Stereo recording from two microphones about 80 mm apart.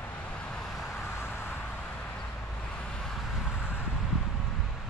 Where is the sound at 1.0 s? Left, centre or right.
Left.